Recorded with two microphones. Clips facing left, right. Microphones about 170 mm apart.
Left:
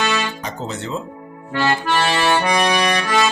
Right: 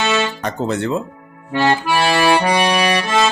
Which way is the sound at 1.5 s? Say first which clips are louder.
Right 3 dB; 15° right (ahead or behind).